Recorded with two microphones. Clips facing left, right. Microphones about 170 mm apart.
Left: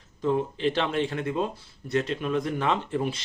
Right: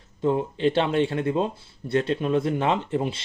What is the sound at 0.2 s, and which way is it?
Speech, 30° right (ahead or behind).